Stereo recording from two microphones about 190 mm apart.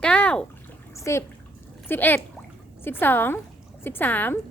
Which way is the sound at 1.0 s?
15° left (ahead or behind).